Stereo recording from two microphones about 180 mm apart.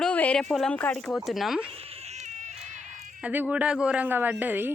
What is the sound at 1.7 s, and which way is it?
Cat, 35° right (ahead or behind).